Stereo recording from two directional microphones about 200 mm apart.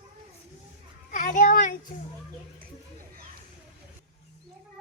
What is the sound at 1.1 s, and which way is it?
Children playing, 40° left (ahead or behind).